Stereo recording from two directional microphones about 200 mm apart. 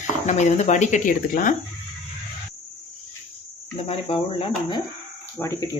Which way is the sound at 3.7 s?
30° left (ahead or behind).